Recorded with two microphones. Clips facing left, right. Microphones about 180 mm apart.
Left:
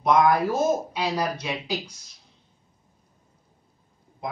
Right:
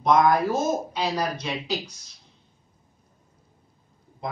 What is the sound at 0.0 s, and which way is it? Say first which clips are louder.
Speech: even; 10° left (ahead or behind).